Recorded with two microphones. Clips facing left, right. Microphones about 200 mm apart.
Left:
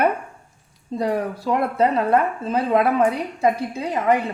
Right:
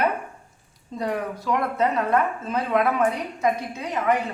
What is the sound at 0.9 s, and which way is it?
Speech, 30° left (ahead or behind).